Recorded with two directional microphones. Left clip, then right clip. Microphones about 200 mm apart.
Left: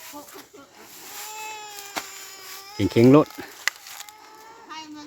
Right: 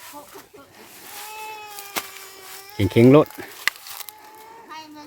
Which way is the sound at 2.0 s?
25° right (ahead or behind).